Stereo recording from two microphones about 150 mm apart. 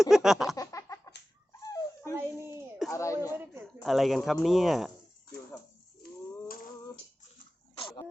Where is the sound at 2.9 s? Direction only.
20° left (ahead or behind).